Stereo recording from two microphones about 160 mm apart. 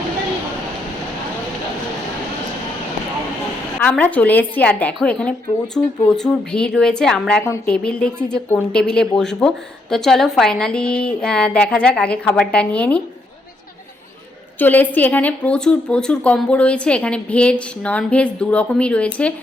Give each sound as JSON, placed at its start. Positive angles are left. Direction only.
{"t": 3.8, "sound": "a woman's voice", "side_deg": 10}
{"t": 7.4, "sound": "a woman's voice", "side_deg": 15}
{"t": 7.7, "sound": "a woman's voice", "side_deg": 5}
{"t": 14.6, "sound": "a woman's voice", "side_deg": 10}